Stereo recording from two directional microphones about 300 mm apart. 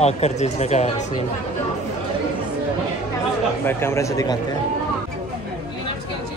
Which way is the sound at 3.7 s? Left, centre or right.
Centre.